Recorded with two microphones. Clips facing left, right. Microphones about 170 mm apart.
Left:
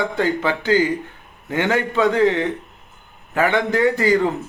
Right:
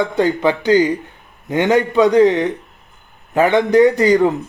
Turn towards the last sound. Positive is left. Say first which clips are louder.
# right 6 dB
turn(degrees=-20)  # may be behind; listen again after turning